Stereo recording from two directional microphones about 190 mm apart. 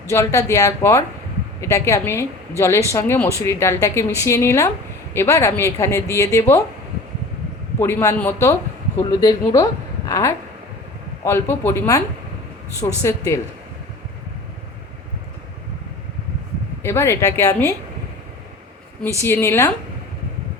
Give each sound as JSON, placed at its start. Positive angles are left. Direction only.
{"t": 0.1, "sound": "a woman's voice", "side_deg": 15}
{"t": 7.8, "sound": "a woman's voice", "side_deg": 15}
{"t": 16.8, "sound": "a woman's voice", "side_deg": 15}
{"t": 19.2, "sound": "a woman's voice", "side_deg": 15}